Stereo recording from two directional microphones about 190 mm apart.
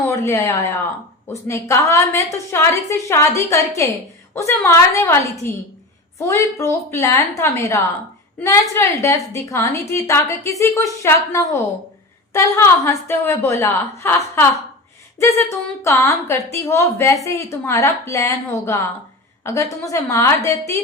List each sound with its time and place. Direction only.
0.1 s a woman's voice: 15° left (ahead or behind)